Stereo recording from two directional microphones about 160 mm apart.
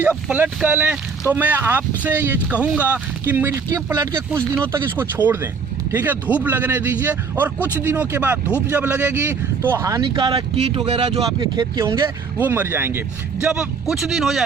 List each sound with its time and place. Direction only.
0.3 s speech: 10° right (ahead or behind)